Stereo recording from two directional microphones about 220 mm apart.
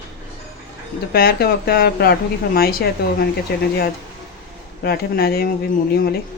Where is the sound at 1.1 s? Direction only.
45° left (ahead or behind).